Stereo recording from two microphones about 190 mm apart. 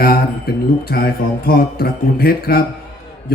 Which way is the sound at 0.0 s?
50° left (ahead or behind).